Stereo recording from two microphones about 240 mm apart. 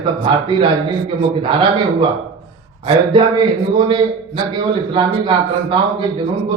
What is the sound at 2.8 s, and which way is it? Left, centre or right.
A man's voice, centre.